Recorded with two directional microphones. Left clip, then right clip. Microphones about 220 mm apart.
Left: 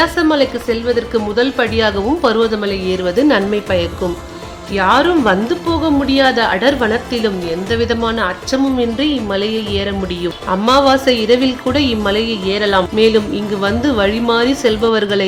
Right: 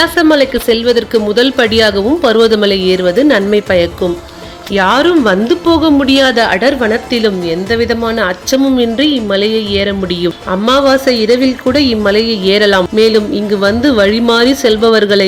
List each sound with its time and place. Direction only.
0.2 s a woman's voice: 15° right (ahead or behind)
0.7 s speech: 30° right (ahead or behind)
2.5 s a woman's voice: 30° right (ahead or behind)